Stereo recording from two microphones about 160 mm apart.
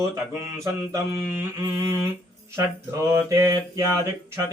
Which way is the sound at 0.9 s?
20° right (ahead or behind).